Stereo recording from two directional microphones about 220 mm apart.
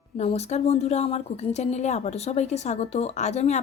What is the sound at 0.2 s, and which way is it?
A woman's voice, 30° left (ahead or behind).